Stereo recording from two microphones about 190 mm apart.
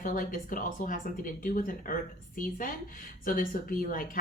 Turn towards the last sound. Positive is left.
turn(degrees=45)  # may be behind; listen again after turning